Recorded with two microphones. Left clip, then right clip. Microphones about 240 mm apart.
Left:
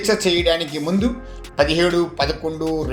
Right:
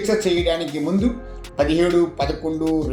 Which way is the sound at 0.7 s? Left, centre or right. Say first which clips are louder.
Even; centre.